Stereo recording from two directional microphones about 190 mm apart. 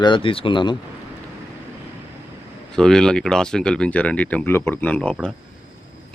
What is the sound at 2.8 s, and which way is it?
Speech, 5° left (ahead or behind).